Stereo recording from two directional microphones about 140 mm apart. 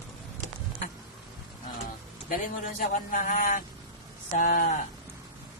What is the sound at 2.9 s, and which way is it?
Speech, 75° left (ahead or behind).